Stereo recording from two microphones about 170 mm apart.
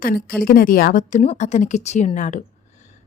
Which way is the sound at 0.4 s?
55° left (ahead or behind).